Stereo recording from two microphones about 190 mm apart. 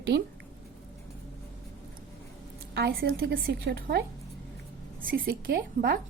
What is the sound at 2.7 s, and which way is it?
A woman's voice, 55° right (ahead or behind).